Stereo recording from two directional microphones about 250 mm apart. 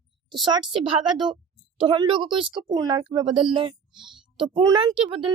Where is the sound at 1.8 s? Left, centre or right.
Right.